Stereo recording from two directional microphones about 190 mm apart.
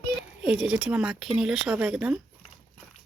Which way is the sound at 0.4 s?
5° right (ahead or behind).